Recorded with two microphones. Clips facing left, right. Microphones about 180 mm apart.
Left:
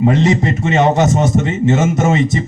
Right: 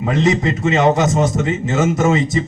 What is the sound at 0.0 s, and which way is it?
Speech, 30° left (ahead or behind).